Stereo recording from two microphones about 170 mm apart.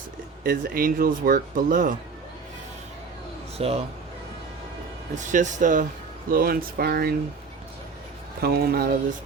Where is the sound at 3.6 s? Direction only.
35° right (ahead or behind).